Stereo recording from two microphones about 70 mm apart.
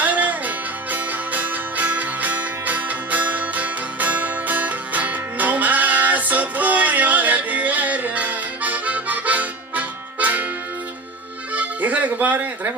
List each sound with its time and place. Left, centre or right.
0.0 s music: right
11.5 s music: right